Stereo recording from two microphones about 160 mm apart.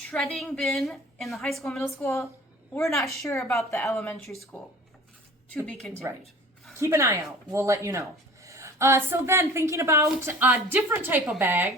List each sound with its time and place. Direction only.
0.1 s a woman's voice: centre (ahead or behind)
2.0 s speech: 15° left (ahead or behind)
5.5 s a woman's voice: 5° left (ahead or behind)
6.7 s speech: 15° right (ahead or behind)